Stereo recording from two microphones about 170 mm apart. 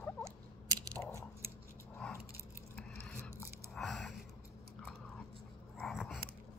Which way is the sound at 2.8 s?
10° left (ahead or behind).